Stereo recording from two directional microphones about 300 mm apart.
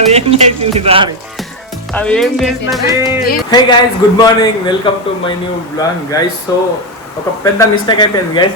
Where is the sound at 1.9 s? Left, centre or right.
Centre.